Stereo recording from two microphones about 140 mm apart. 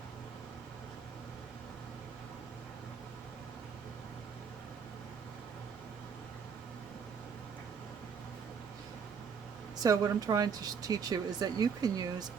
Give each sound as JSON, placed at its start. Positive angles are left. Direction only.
{"t": 9.8, "sound": "speech", "side_deg": -25}